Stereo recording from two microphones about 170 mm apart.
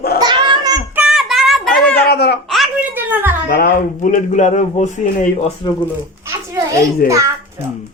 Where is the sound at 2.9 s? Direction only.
10° right (ahead or behind).